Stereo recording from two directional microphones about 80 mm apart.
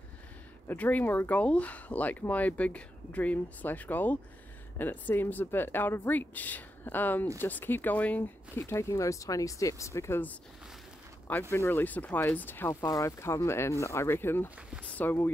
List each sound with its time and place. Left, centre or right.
0.7 s speech: left
8.2 s speech: left
11.5 s speech: left